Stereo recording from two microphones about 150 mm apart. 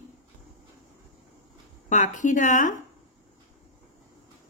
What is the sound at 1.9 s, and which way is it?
Speech, 55° left (ahead or behind).